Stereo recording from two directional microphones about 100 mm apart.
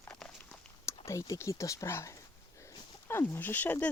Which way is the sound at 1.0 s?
30° left (ahead or behind).